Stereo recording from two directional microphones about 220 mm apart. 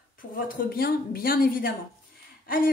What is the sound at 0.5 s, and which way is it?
A woman's voice, 45° left (ahead or behind).